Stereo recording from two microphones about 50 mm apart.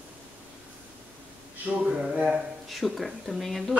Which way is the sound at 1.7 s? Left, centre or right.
Right.